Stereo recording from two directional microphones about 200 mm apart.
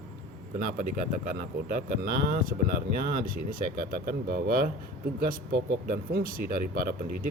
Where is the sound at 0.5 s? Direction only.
40° right (ahead or behind).